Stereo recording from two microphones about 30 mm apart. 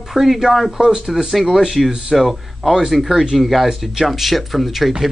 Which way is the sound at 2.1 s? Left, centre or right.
Centre.